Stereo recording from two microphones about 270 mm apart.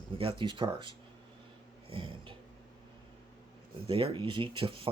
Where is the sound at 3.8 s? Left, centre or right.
Centre.